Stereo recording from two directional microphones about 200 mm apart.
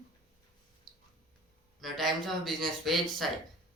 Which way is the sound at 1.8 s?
Centre (ahead or behind).